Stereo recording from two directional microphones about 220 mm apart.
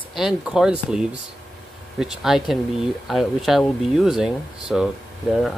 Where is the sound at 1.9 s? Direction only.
Centre (ahead or behind).